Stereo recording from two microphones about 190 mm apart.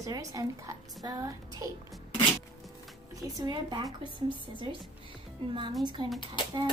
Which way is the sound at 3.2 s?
20° right (ahead or behind).